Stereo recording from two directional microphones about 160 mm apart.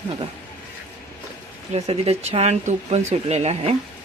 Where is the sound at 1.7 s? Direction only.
40° right (ahead or behind).